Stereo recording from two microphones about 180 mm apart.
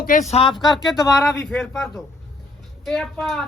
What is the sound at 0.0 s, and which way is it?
Speech, 45° left (ahead or behind).